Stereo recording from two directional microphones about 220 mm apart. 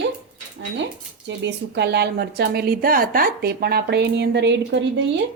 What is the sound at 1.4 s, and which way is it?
Speech, 50° right (ahead or behind).